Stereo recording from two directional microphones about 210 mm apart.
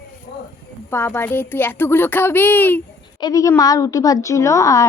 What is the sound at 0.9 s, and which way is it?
A woman's voice, 10° left (ahead or behind).